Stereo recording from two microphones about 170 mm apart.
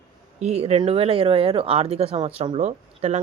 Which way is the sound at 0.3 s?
40° right (ahead or behind).